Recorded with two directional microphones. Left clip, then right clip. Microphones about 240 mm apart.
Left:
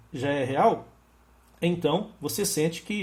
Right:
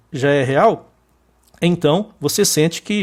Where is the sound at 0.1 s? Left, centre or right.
Right.